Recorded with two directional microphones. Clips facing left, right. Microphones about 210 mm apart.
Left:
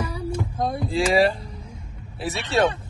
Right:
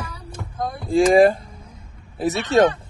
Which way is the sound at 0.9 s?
50° right (ahead or behind).